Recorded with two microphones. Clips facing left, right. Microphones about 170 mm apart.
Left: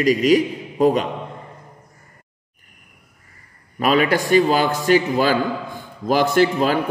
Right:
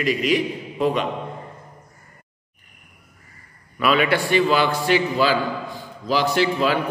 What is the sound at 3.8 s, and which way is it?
A man's voice, 40° left (ahead or behind).